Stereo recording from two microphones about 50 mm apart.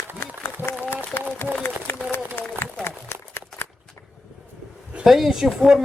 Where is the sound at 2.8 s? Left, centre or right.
Left.